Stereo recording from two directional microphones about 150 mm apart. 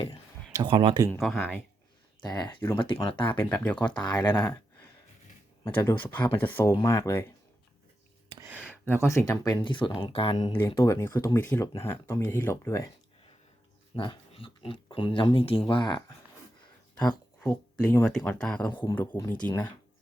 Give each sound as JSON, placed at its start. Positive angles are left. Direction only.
{"t": 0.5, "sound": "speech", "side_deg": -35}
{"t": 1.2, "sound": "speech", "side_deg": 0}
{"t": 2.2, "sound": "speech", "side_deg": 30}
{"t": 3.5, "sound": "speech", "side_deg": 10}
{"t": 4.0, "sound": "speech", "side_deg": 30}
{"t": 5.6, "sound": "speech", "side_deg": 15}
{"t": 8.4, "sound": "a sound", "side_deg": -10}
{"t": 8.8, "sound": "speech", "side_deg": 15}
{"t": 10.8, "sound": "speech", "side_deg": 20}
{"t": 13.9, "sound": "speech", "side_deg": 35}
{"t": 17.1, "sound": "speech", "side_deg": 5}
{"t": 18.7, "sound": "speech", "side_deg": 30}
{"t": 19.4, "sound": "speech", "side_deg": 15}